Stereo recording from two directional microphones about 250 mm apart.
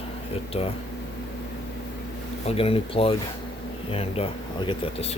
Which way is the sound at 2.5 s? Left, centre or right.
Left.